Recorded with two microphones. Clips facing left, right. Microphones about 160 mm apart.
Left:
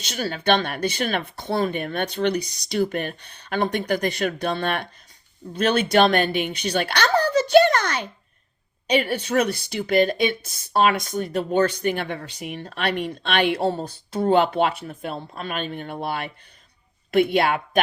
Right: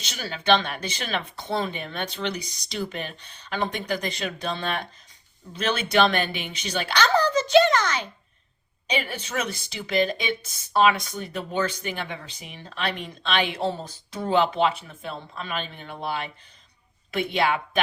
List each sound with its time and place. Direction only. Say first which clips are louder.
0.1 s a woman's voice: left 1 dB; 45° left (ahead or behind)